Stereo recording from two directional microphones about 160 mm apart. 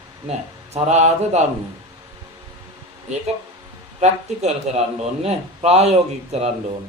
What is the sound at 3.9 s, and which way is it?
A man's voice, 45° right (ahead or behind).